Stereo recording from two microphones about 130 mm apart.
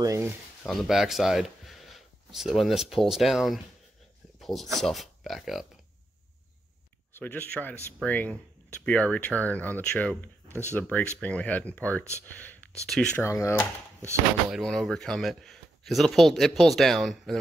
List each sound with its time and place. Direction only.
0.0 s speech: 25° right (ahead or behind)
0.7 s speech: centre (ahead or behind)
4.4 s a sound: centre (ahead or behind)
4.7 s speech: centre (ahead or behind)
7.2 s speech: 15° left (ahead or behind)
13.2 s speech: 20° left (ahead or behind)
14.5 s speech: centre (ahead or behind)